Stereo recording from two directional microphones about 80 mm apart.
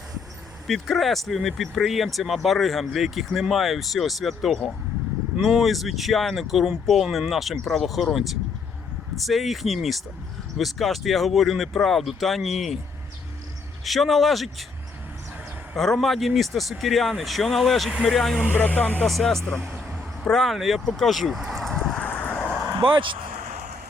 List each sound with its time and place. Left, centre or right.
0.7 s speech: centre
13.8 s speech: centre
15.7 s speech: centre
18.4 s speech: left
19.0 s speech: centre
21.6 s vehicle: centre
22.0 s vehicle: centre
22.8 s speech: right